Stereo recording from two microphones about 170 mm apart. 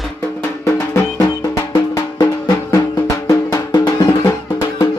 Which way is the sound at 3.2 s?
20° left (ahead or behind).